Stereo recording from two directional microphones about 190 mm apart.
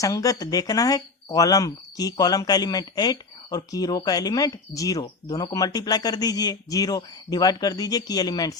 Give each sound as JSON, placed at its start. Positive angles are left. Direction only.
{"t": 0.0, "sound": "speech", "side_deg": 15}